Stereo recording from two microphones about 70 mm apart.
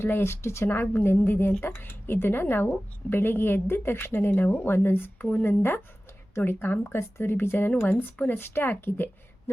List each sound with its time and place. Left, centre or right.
0.0 s a woman's voice: left